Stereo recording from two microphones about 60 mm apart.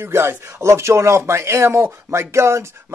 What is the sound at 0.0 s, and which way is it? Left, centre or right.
Speech, right.